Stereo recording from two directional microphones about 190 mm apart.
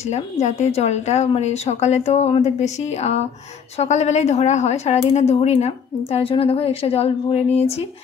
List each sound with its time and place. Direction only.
0.1 s a woman's voice: 35° left (ahead or behind)